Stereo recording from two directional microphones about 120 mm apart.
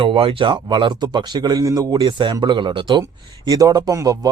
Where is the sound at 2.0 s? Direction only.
40° right (ahead or behind).